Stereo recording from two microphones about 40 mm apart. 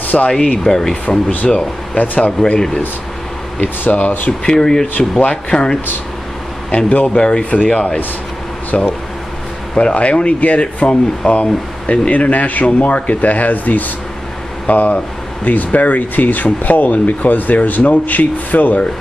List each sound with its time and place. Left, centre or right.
0.1 s speech: centre
2.0 s speech: left
3.8 s speech: left
4.3 s speech: centre
6.9 s speech: left